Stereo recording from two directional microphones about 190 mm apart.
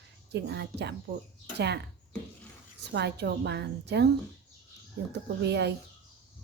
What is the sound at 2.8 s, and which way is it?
A woman's voice, 65° right (ahead or behind).